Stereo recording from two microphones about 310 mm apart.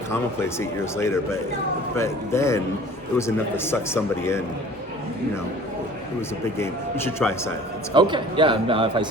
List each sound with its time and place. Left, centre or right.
0.1 s a man's voice: centre
6.4 s a man's voice: centre
7.9 s speech: centre